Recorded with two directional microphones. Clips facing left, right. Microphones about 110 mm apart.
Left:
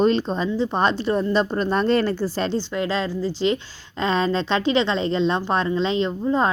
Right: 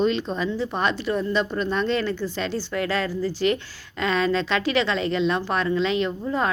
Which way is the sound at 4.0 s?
30° left (ahead or behind).